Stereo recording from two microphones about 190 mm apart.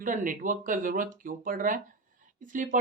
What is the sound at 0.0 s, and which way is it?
Speech, 45° right (ahead or behind).